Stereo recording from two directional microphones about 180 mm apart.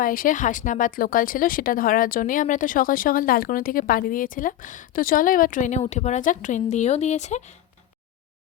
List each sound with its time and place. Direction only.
0.0 s speech: 50° left (ahead or behind)